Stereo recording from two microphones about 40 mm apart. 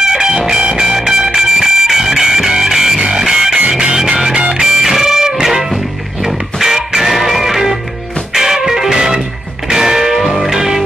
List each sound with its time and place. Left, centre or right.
0.0 s music: centre
0.6 s music: right; by 10.8 s centre